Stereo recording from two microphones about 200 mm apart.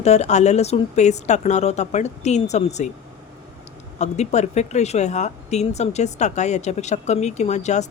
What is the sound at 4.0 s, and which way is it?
Speech, 35° left (ahead or behind).